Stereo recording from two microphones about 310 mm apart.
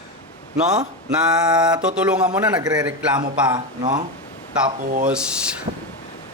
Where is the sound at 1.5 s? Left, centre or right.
Centre.